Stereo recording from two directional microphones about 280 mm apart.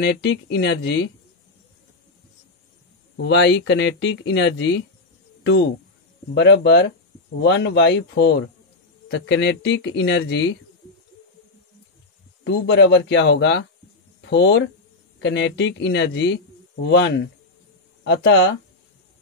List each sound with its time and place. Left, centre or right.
0.0 s speech: left
3.2 s speech: left
12.4 s speech: left